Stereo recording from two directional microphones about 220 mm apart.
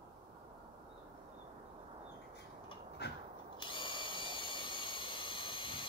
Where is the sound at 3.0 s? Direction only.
50° left (ahead or behind).